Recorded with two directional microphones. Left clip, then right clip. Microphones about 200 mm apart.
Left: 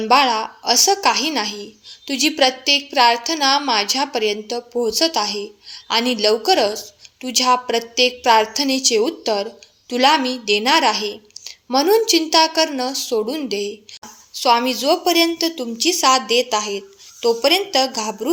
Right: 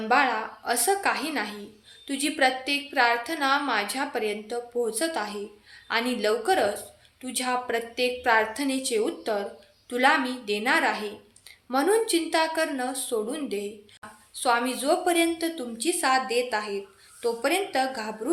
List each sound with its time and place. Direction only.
0.1 s a woman's voice: 40° left (ahead or behind)